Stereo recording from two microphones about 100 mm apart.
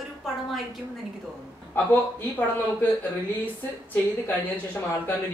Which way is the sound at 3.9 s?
20° left (ahead or behind).